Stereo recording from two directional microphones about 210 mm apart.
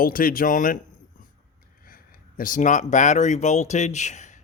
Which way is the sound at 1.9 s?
40° left (ahead or behind).